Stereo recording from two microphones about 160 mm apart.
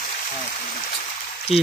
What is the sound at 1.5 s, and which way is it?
Speech, 40° left (ahead or behind).